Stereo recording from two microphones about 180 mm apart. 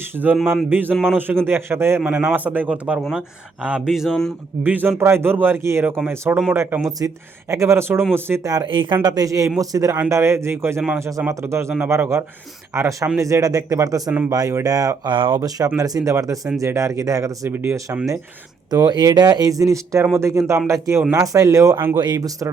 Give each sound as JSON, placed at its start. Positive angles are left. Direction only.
{"t": 0.2, "sound": "a man's voice", "side_deg": -10}
{"t": 4.6, "sound": "a man's voice", "side_deg": -10}